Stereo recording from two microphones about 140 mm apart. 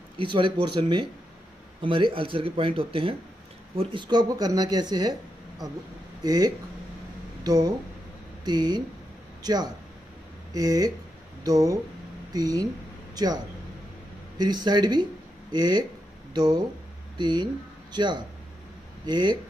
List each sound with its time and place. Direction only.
0.2 s speech: 35° right (ahead or behind)
6.2 s a man's voice: 25° right (ahead or behind)
14.4 s speech: 30° right (ahead or behind)